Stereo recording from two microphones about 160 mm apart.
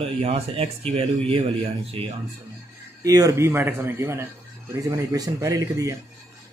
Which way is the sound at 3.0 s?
20° right (ahead or behind).